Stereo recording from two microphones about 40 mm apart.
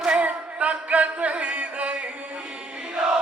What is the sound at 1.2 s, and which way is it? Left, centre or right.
Music, right.